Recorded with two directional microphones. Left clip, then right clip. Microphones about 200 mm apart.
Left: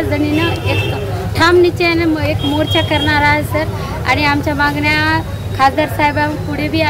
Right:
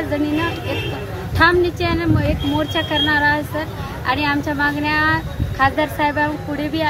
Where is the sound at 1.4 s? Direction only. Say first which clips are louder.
Left 4 dB; 5° left (ahead or behind).